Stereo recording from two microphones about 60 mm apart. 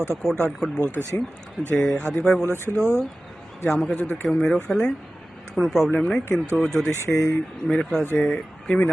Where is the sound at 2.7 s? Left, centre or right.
Right.